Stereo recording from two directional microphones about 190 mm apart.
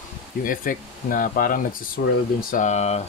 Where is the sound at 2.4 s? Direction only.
40° left (ahead or behind).